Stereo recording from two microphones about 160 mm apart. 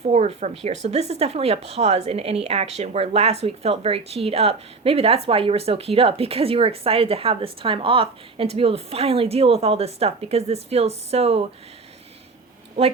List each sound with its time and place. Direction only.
0.0 s speech: 45° right (ahead or behind)